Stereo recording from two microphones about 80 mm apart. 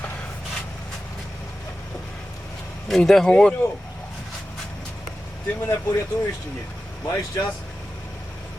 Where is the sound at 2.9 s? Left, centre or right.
Centre.